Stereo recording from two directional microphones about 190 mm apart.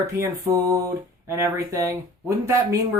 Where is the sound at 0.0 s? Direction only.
15° right (ahead or behind).